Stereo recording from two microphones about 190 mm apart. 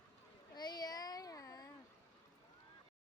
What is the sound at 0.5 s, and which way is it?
Child singing, 20° left (ahead or behind).